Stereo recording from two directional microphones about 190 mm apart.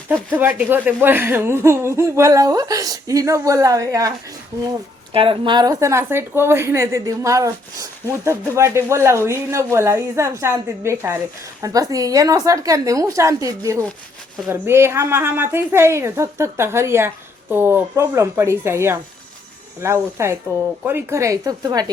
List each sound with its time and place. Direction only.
0.1 s speech: 10° right (ahead or behind)
5.1 s speech: 30° right (ahead or behind)